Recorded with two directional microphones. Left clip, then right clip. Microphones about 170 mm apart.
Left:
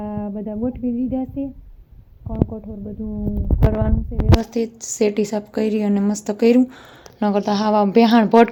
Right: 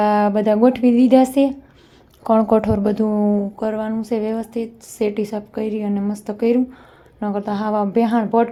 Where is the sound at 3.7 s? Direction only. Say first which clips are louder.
Right 3 dB; centre (ahead or behind).